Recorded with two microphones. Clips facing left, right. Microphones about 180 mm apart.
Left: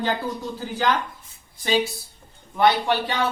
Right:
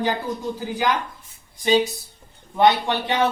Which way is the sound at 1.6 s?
20° right (ahead or behind).